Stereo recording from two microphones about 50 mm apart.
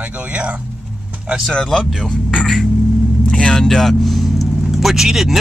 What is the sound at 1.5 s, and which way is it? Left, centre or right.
Speech, centre.